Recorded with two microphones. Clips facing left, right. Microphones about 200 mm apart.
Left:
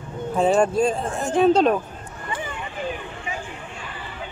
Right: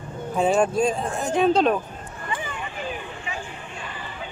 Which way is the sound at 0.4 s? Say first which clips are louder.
Left 2 dB; centre (ahead or behind).